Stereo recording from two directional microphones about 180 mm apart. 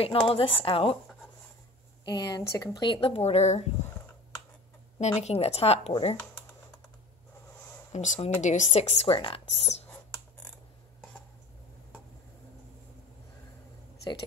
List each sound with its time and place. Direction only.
0.0 s speech: 30° left (ahead or behind)
2.0 s speech: 20° left (ahead or behind); by 3.6 s 35° left (ahead or behind)
5.0 s speech: 35° left (ahead or behind)
7.9 s speech: 40° left (ahead or behind)